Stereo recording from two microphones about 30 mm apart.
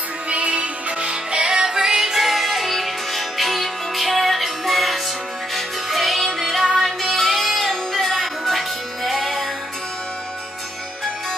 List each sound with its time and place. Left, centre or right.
0.3 s music: right
1.3 s music: right; by 9.5 s centre